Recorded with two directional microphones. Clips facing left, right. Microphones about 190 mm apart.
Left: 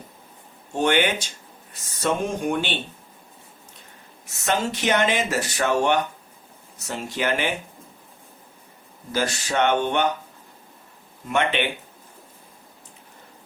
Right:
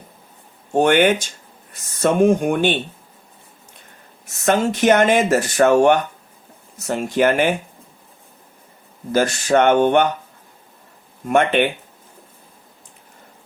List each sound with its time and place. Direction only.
0.7 s speech: 50° right (ahead or behind)
4.4 s speech: 50° right (ahead or behind)
9.1 s speech: 50° right (ahead or behind)
11.3 s speech: 50° right (ahead or behind)